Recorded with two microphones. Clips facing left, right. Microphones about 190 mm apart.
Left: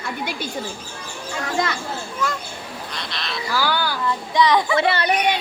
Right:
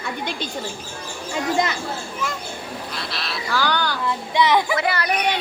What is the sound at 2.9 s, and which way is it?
Speech, 5° right (ahead or behind).